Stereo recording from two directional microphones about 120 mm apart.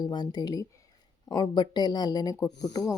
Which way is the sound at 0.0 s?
35° left (ahead or behind).